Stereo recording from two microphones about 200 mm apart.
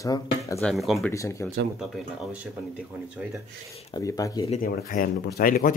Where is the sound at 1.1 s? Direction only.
15° left (ahead or behind).